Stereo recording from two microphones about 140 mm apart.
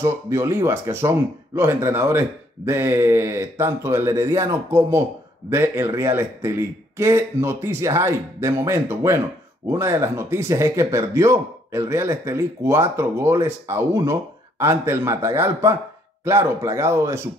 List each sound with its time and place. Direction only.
0.0 s speech: 20° right (ahead or behind)